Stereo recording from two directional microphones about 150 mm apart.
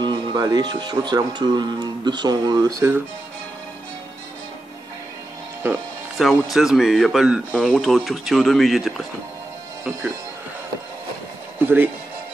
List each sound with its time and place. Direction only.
0.0 s speech: 30° right (ahead or behind)
5.6 s speech: 10° right (ahead or behind)
6.1 s speech: centre (ahead or behind)
11.6 s speech: 15° right (ahead or behind)